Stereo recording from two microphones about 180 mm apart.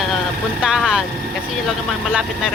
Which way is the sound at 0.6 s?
5° right (ahead or behind).